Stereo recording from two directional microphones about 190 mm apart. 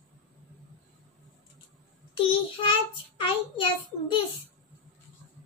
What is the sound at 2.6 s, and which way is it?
Child singing, 25° left (ahead or behind).